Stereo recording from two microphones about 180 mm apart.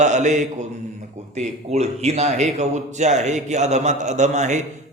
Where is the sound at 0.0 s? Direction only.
40° right (ahead or behind).